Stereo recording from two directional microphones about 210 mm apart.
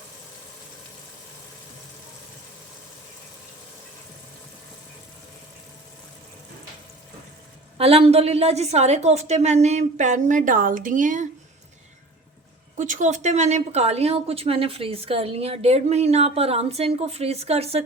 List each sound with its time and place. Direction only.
7.8 s a woman's voice: 30° right (ahead or behind)
12.7 s a woman's voice: 35° right (ahead or behind)